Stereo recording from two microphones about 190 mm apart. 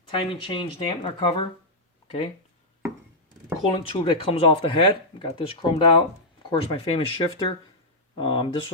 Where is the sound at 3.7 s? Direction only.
25° left (ahead or behind).